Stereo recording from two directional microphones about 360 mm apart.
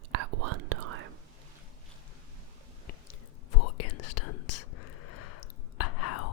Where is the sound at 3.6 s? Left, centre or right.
Left.